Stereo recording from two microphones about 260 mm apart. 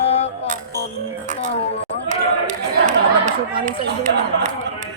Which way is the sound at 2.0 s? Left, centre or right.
Right.